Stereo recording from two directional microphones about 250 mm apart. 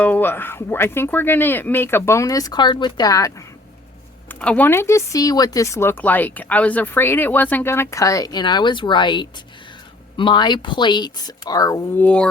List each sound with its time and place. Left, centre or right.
0.0 s speech: centre